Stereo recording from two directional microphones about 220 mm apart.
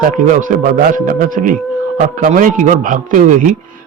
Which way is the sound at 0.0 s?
35° right (ahead or behind).